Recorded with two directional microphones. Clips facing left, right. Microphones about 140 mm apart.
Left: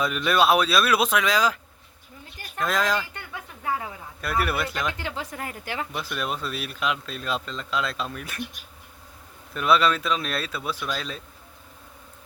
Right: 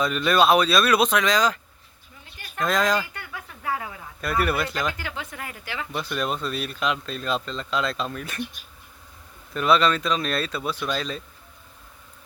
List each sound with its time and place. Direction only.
0.0 s speech: 5° left (ahead or behind)
2.6 s speech: 5° left (ahead or behind)
3.1 s a sound: 25° left (ahead or behind)
4.2 s speech: centre (ahead or behind)
4.9 s a woman's voice: 30° left (ahead or behind)
5.9 s speech: 5° left (ahead or behind)
9.6 s speech: 5° left (ahead or behind)